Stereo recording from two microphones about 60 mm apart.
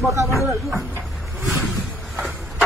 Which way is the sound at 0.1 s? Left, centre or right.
Right.